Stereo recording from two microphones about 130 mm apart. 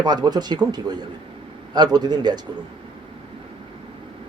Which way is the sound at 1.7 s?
35° right (ahead or behind).